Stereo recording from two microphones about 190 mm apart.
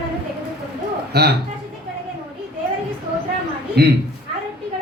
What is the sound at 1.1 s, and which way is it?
Speech, 60° right (ahead or behind).